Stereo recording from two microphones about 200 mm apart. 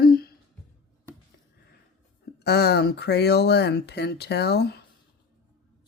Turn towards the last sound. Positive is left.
turn(degrees=55)  # may be behind; listen again after turning